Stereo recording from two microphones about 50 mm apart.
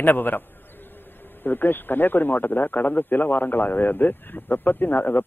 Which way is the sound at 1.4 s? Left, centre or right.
Left.